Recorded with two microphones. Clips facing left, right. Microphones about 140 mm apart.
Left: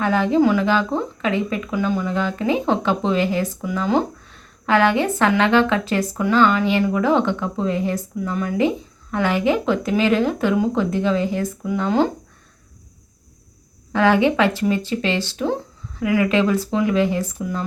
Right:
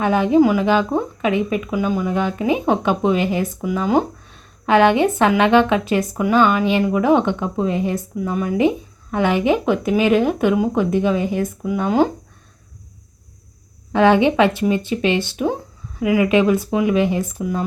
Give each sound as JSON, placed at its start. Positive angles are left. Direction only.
{"t": 0.0, "sound": "speech", "side_deg": -20}
{"t": 13.9, "sound": "speech", "side_deg": -20}